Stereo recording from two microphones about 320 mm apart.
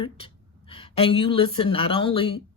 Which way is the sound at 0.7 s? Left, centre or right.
Centre.